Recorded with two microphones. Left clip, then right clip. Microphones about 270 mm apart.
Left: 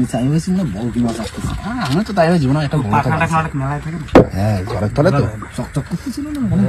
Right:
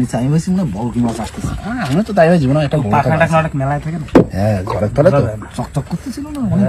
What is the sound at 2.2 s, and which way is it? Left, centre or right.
Speech, centre.